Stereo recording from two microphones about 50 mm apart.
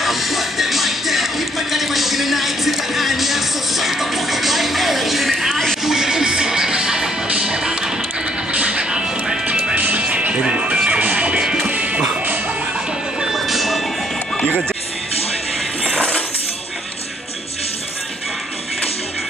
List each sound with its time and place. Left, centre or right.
0.0 s music: centre
5.9 s music: centre
9.8 s music: right
10.0 s music: right
10.9 s music: right
11.4 s music: centre
11.7 s music: right
13.3 s vehicle: centre
15.9 s a sound: centre